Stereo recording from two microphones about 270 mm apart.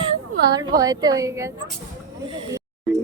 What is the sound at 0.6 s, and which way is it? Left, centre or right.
Speech, centre.